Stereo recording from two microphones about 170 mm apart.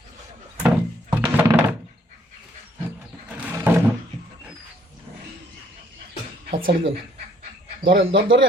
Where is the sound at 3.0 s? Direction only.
10° right (ahead or behind).